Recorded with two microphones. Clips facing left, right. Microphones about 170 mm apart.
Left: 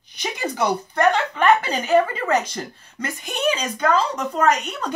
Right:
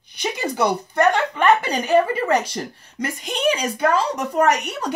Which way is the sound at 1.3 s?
10° right (ahead or behind).